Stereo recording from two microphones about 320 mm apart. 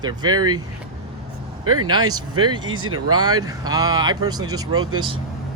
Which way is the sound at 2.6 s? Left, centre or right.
Right.